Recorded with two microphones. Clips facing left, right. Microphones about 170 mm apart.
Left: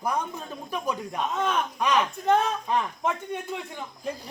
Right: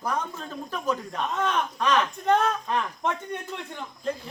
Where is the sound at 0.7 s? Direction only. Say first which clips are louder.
Right 1 dB; 10° left (ahead or behind).